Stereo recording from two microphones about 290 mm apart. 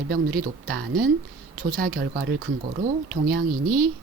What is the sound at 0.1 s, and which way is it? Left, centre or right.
A woman's voice, right.